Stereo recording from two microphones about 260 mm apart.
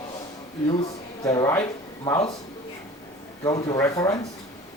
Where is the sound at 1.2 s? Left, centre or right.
Centre.